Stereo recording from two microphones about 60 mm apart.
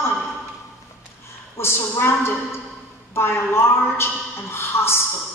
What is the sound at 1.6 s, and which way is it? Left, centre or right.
A woman's voice, left.